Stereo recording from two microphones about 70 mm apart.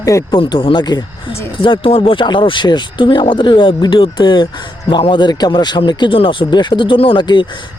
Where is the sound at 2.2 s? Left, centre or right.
Left.